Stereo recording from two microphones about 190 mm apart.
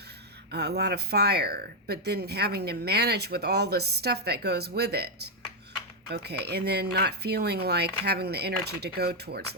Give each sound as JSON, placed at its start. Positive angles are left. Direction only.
{"t": 0.5, "sound": "speech", "side_deg": -60}